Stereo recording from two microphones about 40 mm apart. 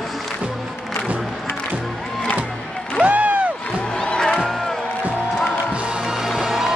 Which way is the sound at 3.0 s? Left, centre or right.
Right.